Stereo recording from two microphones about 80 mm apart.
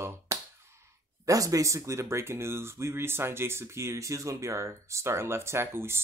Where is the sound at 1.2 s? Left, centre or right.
Right.